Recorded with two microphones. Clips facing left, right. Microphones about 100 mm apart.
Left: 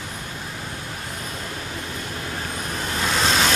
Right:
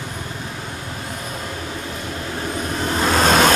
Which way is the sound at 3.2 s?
50° right (ahead or behind).